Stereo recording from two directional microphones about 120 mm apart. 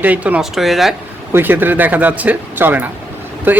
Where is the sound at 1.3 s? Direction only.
15° right (ahead or behind).